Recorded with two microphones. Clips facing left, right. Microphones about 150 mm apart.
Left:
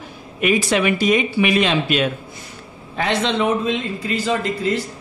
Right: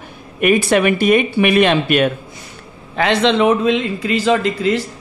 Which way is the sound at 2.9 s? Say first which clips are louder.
Right 5 dB; 80° right.